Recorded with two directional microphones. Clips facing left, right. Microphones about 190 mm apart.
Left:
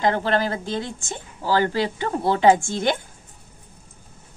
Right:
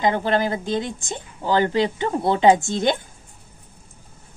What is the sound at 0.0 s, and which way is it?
A woman's voice, 15° right (ahead or behind).